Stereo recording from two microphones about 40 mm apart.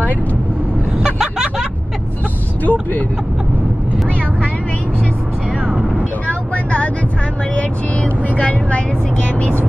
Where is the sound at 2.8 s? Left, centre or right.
Left.